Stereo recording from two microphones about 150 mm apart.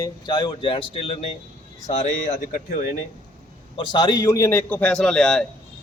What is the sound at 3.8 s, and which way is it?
A man's voice, 30° left (ahead or behind).